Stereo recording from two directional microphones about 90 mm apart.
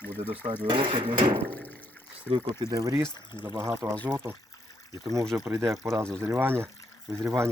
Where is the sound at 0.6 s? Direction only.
70° right (ahead or behind).